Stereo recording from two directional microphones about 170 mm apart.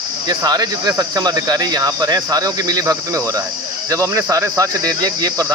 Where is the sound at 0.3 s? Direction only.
25° right (ahead or behind).